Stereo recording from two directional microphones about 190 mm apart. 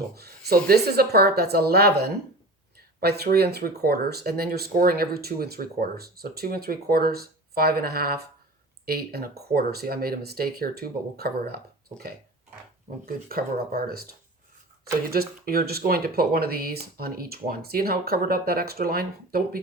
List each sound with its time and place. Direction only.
0.1 s speech: 55° right (ahead or behind)